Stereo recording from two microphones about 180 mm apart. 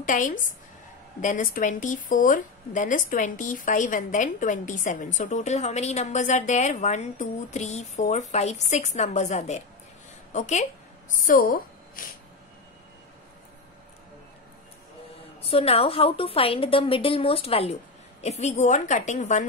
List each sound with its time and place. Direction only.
0.0 s a woman's voice: 45° left (ahead or behind)
15.4 s a woman's voice: 35° left (ahead or behind)